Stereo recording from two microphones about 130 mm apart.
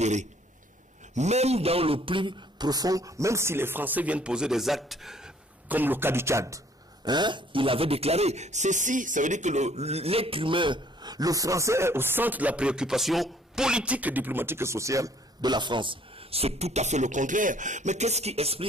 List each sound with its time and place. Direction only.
0.0 s a man's voice: 65° right (ahead or behind); by 6.6 s 20° right (ahead or behind)
7.1 s speech: 35° right (ahead or behind)